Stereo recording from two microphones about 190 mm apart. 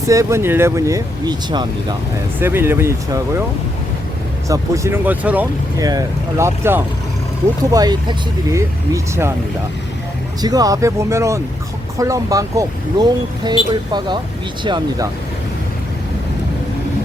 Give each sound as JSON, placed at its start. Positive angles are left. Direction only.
{"t": 0.1, "sound": "speech", "side_deg": -15}
{"t": 2.4, "sound": "speech", "side_deg": -10}
{"t": 4.4, "sound": "speech", "side_deg": -15}
{"t": 10.4, "sound": "speech", "side_deg": -20}
{"t": 14.6, "sound": "speech", "side_deg": -25}